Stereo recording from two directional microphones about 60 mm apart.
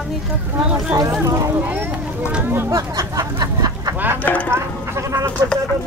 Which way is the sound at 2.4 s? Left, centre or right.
Right.